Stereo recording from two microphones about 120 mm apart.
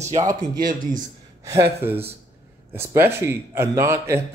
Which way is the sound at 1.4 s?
25° right (ahead or behind).